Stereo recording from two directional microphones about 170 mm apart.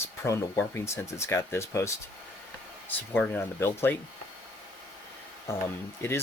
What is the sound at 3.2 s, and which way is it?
Speech, 10° left (ahead or behind).